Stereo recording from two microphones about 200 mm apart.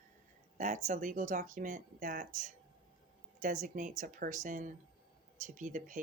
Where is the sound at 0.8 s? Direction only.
40° right (ahead or behind).